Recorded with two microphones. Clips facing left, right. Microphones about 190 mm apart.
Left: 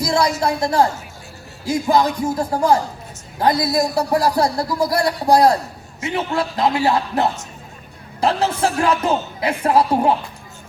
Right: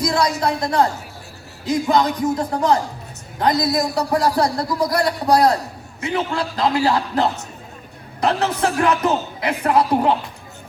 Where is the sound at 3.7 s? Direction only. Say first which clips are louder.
Left 2 dB; 25° left (ahead or behind).